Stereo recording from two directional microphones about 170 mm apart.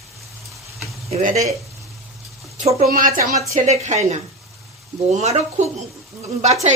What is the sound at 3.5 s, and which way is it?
A woman's voice, 40° right (ahead or behind).